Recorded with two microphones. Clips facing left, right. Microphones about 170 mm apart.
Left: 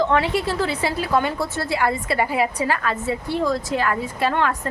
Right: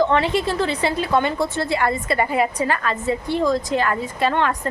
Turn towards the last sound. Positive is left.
turn(degrees=5)  # may be behind; listen again after turning